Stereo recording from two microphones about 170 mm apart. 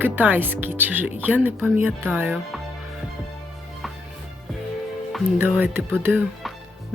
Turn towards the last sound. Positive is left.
turn(degrees=-10)  # may be behind; listen again after turning